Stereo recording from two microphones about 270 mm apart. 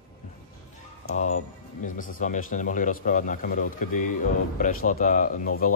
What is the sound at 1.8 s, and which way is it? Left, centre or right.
Speech, left.